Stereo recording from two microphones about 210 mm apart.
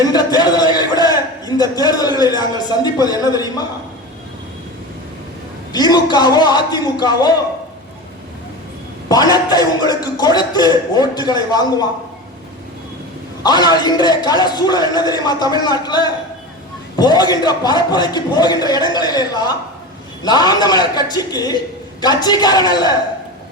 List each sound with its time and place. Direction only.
0.0 s a sound: 20° left (ahead or behind)
5.7 s a man's voice: 20° left (ahead or behind)
9.0 s a man's voice: 20° left (ahead or behind)
13.4 s a man's voice: 20° left (ahead or behind)